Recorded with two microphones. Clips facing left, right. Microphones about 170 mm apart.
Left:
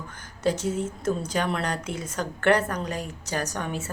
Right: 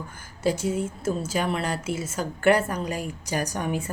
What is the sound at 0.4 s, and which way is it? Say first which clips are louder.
A woman's voice: right 1 dB; 10° right (ahead or behind).